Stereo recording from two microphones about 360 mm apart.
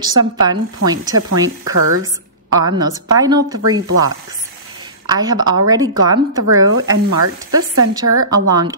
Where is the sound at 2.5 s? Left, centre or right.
Centre.